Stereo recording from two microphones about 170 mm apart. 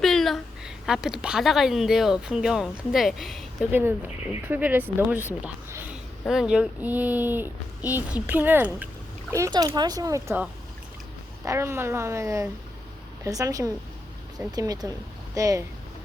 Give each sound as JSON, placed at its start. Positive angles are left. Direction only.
{"t": 0.0, "sound": "a woman's voice", "side_deg": 0}
{"t": 3.7, "sound": "a woman's voice", "side_deg": -10}
{"t": 9.3, "sound": "speech", "side_deg": -20}
{"t": 11.4, "sound": "a woman's voice", "side_deg": -15}